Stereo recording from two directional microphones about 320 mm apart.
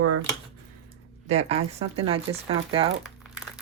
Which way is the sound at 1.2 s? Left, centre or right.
Right.